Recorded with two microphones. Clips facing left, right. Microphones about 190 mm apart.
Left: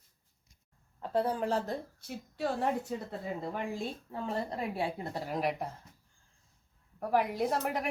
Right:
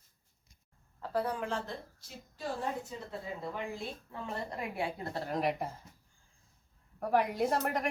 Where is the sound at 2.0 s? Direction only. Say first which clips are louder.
Left 8 dB; 65° left (ahead or behind).